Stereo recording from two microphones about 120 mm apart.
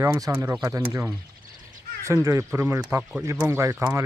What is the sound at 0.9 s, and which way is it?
Speech, 20° right (ahead or behind).